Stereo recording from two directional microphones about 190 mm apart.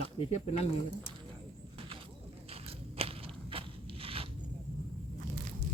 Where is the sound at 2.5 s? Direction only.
30° right (ahead or behind).